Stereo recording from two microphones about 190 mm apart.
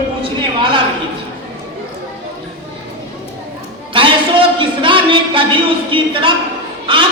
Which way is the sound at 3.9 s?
25° right (ahead or behind).